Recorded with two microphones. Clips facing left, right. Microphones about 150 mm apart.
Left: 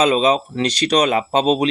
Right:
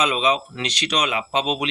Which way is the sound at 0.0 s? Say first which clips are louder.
Left 6 dB; 35° left (ahead or behind).